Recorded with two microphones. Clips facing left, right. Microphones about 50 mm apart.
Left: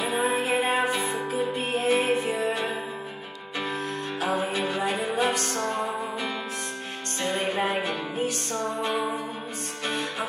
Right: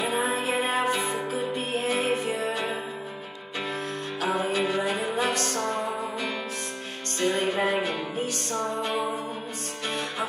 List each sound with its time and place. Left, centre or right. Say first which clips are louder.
0.0 s music: left 1 dB; left
4.4 s music: right 1 dB; left
7.2 s music: right 2 dB; left